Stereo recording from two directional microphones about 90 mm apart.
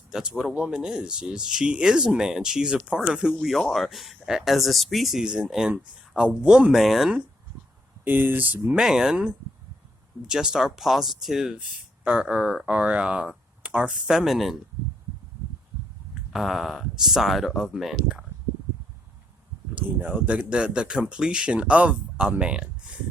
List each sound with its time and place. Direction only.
0.1 s speech: 5° right (ahead or behind)
8.0 s speech: 20° right (ahead or behind)
8.7 s speech: 5° right (ahead or behind)
16.3 s speech: centre (ahead or behind)
19.7 s speech: 15° right (ahead or behind)